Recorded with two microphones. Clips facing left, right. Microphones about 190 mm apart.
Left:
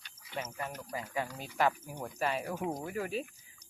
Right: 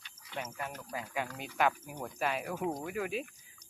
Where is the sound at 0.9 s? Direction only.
Centre (ahead or behind).